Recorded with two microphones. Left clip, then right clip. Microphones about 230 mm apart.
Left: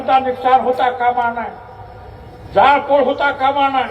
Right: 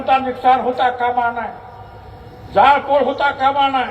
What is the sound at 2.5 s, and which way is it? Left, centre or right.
A man's voice, right.